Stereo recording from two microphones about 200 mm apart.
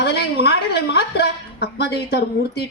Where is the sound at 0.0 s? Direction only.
55° left (ahead or behind).